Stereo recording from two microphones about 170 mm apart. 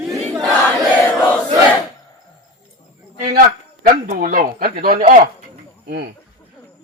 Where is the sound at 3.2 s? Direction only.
60° right (ahead or behind).